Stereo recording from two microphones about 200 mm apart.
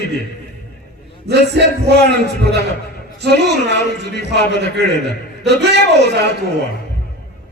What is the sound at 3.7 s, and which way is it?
A man's voice, 55° right (ahead or behind).